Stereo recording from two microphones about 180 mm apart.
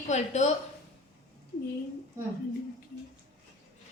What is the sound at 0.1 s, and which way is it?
Speech, 40° left (ahead or behind).